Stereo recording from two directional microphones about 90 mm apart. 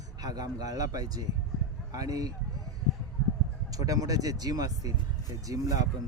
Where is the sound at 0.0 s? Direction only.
45° right (ahead or behind).